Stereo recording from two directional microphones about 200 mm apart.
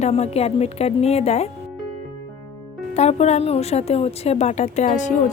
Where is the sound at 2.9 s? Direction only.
35° left (ahead or behind).